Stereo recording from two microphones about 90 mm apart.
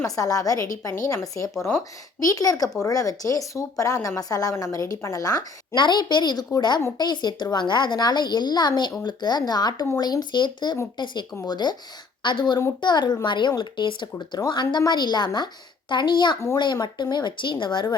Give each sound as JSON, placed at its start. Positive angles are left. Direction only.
{"t": 0.0, "sound": "speech", "side_deg": 40}
{"t": 2.2, "sound": "a woman's voice", "side_deg": 40}